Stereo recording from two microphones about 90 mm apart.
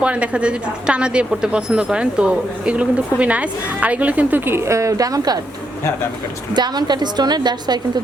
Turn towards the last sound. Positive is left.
turn(degrees=-50)  # may be behind; listen again after turning